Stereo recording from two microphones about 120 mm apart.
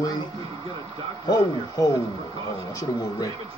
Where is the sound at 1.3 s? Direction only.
30° left (ahead or behind).